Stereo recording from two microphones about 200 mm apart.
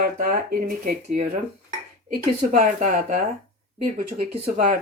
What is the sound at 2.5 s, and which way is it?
Speech, 40° right (ahead or behind).